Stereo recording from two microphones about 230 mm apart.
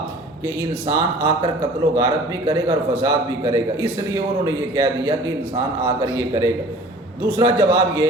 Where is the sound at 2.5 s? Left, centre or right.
Centre.